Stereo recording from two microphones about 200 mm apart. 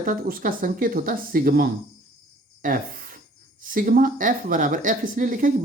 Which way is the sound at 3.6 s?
45° right (ahead or behind).